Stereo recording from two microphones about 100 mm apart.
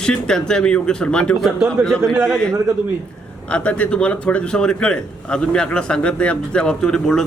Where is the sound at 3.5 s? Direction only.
15° left (ahead or behind).